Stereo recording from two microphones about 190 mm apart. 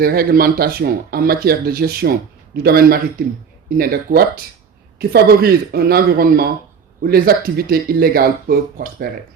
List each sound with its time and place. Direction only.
0.0 s speech: 50° right (ahead or behind)